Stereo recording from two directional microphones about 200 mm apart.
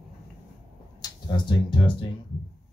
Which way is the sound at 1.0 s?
20° left (ahead or behind).